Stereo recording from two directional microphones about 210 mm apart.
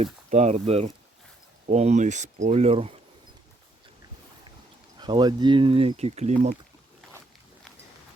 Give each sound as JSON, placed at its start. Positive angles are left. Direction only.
{"t": 0.0, "sound": "speech", "side_deg": -30}
{"t": 4.9, "sound": "speech", "side_deg": -20}